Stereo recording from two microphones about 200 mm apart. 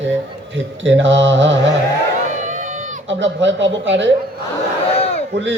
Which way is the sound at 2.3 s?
40° right (ahead or behind).